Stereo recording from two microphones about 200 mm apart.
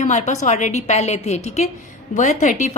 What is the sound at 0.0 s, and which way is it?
A woman's voice, 35° left (ahead or behind).